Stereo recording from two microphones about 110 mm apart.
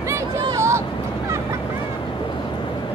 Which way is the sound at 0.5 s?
25° right (ahead or behind).